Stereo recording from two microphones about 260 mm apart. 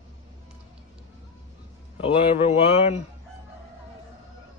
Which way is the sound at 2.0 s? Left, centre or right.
Left.